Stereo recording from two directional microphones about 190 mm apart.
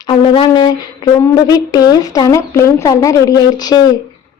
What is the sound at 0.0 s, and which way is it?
Speech, 25° left (ahead or behind).